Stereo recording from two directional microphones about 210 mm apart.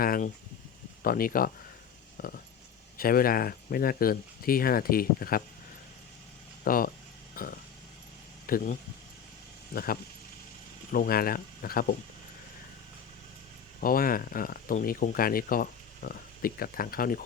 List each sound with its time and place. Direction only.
0.0 s speech: 45° left (ahead or behind)
2.1 s a sound: 45° left (ahead or behind)
3.0 s speech: 45° left (ahead or behind)
6.7 s speech: 40° left (ahead or behind)
7.4 s a sound: 45° left (ahead or behind)
8.4 s speech: 40° left (ahead or behind)
13.8 s speech: 40° left (ahead or behind)